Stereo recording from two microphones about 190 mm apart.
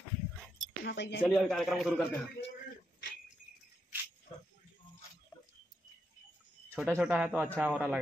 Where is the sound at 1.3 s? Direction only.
Centre (ahead or behind).